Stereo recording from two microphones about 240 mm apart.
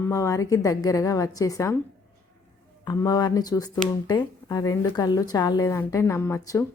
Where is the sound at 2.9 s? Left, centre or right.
Centre.